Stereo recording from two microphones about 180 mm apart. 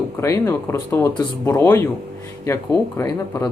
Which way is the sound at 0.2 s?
15° left (ahead or behind).